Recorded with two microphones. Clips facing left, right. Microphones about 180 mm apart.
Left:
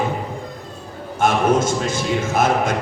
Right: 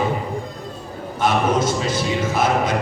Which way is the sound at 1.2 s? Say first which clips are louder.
Left 2 dB; 50° left (ahead or behind).